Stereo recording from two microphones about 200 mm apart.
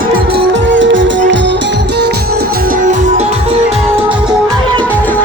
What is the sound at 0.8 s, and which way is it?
Music, 65° right (ahead or behind).